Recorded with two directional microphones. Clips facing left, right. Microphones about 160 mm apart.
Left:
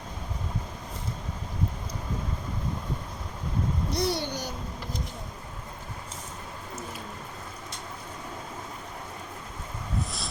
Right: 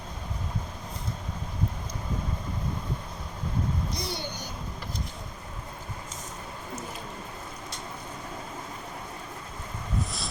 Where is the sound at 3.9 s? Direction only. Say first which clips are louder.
Left 6 dB; 75° left (ahead or behind).